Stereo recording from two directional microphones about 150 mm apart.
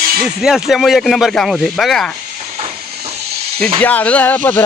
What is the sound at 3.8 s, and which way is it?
Speech, 10° left (ahead or behind).